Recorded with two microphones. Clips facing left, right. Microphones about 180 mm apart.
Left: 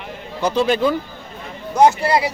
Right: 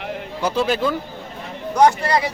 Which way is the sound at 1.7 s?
25° left (ahead or behind).